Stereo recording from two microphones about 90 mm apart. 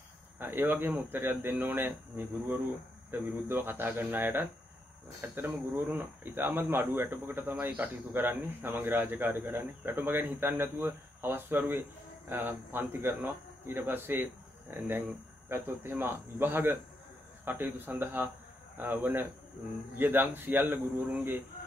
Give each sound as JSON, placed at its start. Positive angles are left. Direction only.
{"t": 0.4, "sound": "speech", "side_deg": -25}